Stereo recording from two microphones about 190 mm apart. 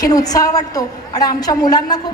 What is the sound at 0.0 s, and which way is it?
A woman's voice, 20° left (ahead or behind).